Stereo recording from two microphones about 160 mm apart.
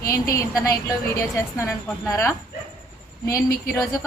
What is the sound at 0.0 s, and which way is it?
A woman's voice, 20° left (ahead or behind).